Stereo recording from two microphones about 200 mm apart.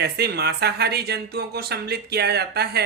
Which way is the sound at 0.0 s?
55° right (ahead or behind).